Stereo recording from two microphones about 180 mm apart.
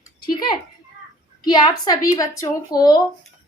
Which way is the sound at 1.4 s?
20° left (ahead or behind).